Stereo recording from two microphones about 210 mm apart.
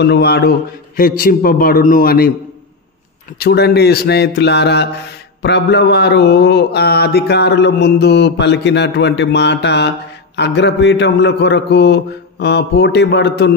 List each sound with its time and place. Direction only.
0.0 s a man's voice: 55° left (ahead or behind)
3.3 s a man's voice: 50° left (ahead or behind)